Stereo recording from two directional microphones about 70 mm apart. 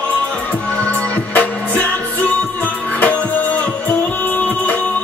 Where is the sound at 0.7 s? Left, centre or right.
Left.